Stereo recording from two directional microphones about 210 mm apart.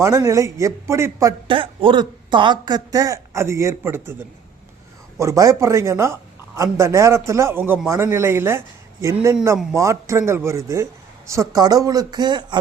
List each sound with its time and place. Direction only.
0.0 s speech: 15° right (ahead or behind)
5.2 s speech: 15° right (ahead or behind)